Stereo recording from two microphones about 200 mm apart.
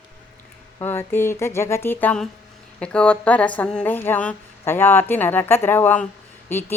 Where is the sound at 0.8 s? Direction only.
10° left (ahead or behind).